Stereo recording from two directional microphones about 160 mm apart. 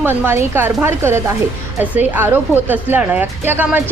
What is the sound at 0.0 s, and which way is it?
A woman's voice, 15° right (ahead or behind).